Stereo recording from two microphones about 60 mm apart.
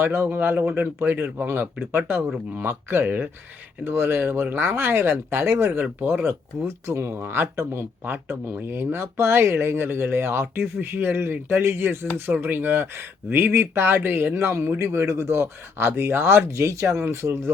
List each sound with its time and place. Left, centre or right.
0.0 s speech: right